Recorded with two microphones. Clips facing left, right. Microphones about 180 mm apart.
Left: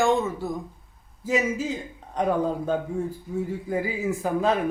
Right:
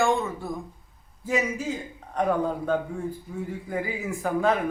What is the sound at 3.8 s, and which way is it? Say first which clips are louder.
Speech: left 2 dB; 20° left (ahead or behind).